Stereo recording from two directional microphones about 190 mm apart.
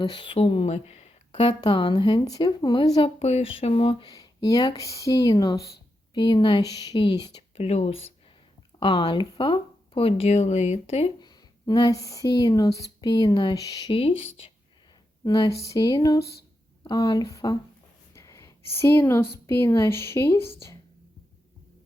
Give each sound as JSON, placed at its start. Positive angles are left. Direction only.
{"t": 0.0, "sound": "speech", "side_deg": 25}
{"t": 3.2, "sound": "speech", "side_deg": 35}
{"t": 7.6, "sound": "speech", "side_deg": 35}
{"t": 15.2, "sound": "speech", "side_deg": 20}
{"t": 18.1, "sound": "a sound", "side_deg": 15}
{"t": 19.3, "sound": "speech", "side_deg": 15}